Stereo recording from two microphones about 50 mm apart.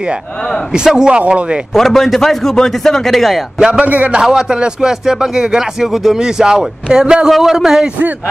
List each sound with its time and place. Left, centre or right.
0.7 s a man's voice: centre
1.7 s a man's voice: centre
3.5 s speech: centre
3.8 s a man's voice: right
4.2 s speech: centre